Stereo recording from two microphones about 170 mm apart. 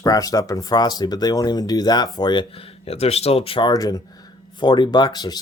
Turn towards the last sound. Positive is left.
turn(degrees=25)  # may be behind; listen again after turning